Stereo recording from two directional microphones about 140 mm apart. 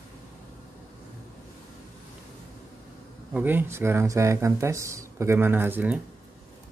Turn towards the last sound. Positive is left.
turn(degrees=-15)  # may be behind; listen again after turning